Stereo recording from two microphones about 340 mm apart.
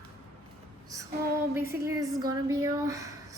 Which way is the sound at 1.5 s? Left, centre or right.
Centre.